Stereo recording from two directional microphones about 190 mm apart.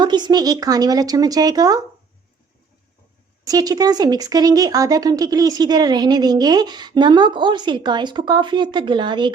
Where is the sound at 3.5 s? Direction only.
20° right (ahead or behind).